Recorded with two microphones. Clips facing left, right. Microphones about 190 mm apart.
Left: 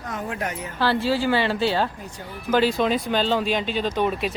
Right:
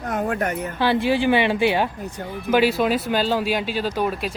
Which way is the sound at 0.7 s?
15° right (ahead or behind).